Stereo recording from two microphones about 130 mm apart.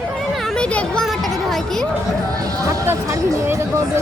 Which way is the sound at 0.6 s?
10° left (ahead or behind).